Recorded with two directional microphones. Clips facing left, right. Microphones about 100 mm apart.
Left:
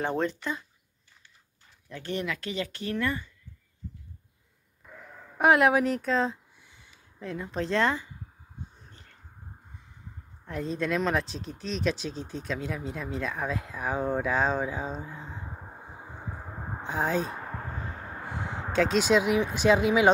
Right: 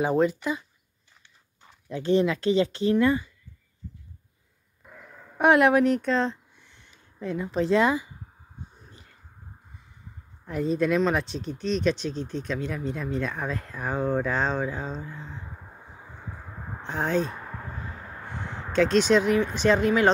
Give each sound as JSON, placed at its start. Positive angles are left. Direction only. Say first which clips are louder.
{"t": 0.0, "sound": "speech", "louder": "right 6 dB", "side_deg": -5}
{"t": 1.9, "sound": "speech", "louder": "right 10 dB", "side_deg": -20}
{"t": 5.4, "sound": "speech", "louder": "right 3 dB", "side_deg": 0}
{"t": 8.9, "sound": "whispering", "louder": "right 2 dB", "side_deg": -10}
{"t": 10.4, "sound": "speech", "louder": "right 6 dB", "side_deg": 0}
{"t": 15.5, "sound": "a sound", "louder": "left 2 dB", "side_deg": 20}
{"t": 16.8, "sound": "speech", "louder": "right 2 dB", "side_deg": 5}
{"t": 17.4, "sound": "a sound", "louder": "left 1 dB", "side_deg": 5}